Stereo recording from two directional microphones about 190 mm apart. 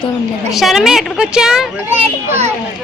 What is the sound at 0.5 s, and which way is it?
A woman's voice, centre (ahead or behind).